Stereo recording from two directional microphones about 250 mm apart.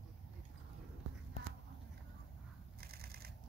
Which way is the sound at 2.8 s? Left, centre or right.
Right.